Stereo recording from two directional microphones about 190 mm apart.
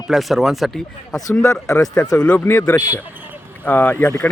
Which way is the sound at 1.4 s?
15° left (ahead or behind).